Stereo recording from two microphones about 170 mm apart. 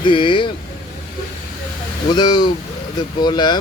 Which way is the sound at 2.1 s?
25° left (ahead or behind).